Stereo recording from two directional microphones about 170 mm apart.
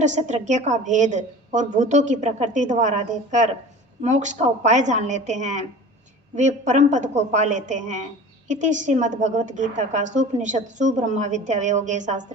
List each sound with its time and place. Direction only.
0.0 s a woman's voice: 45° right (ahead or behind)